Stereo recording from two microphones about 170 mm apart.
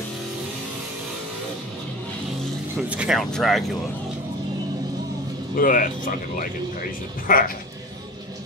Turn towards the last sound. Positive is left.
turn(degrees=55)  # may be behind; listen again after turning